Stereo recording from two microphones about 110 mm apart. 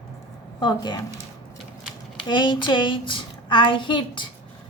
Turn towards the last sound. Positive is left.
turn(degrees=45)  # may be behind; listen again after turning